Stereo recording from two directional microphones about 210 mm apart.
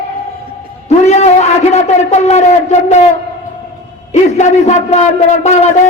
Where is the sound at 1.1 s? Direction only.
30° left (ahead or behind).